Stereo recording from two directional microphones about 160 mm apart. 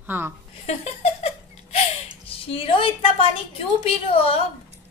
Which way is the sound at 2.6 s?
35° left (ahead or behind).